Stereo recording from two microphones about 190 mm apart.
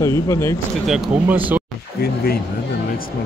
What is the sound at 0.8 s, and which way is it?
Speech, 5° right (ahead or behind).